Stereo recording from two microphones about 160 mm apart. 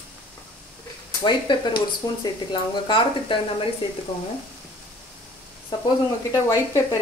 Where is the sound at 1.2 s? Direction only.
30° left (ahead or behind).